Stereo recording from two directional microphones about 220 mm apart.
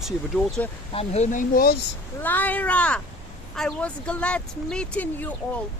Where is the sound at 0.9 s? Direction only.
30° left (ahead or behind).